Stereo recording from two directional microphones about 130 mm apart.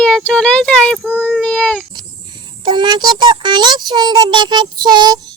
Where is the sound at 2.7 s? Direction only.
35° right (ahead or behind).